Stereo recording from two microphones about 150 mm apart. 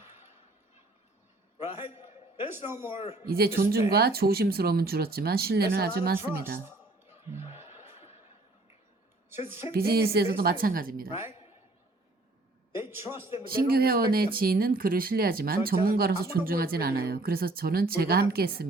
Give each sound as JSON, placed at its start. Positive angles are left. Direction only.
{"t": 2.5, "sound": "speech", "side_deg": -15}
{"t": 2.9, "sound": "speech", "side_deg": 40}
{"t": 3.2, "sound": "speech", "side_deg": -85}
{"t": 7.1, "sound": "music", "side_deg": -15}
{"t": 9.7, "sound": "speech", "side_deg": -90}
{"t": 12.7, "sound": "a man's voice", "side_deg": -15}
{"t": 13.4, "sound": "speech", "side_deg": -80}